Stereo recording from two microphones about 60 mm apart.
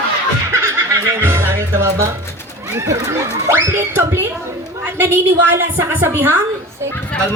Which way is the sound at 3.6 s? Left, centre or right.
Right.